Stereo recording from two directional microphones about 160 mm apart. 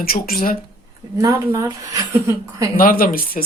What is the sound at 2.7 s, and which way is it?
Speech, 65° left (ahead or behind).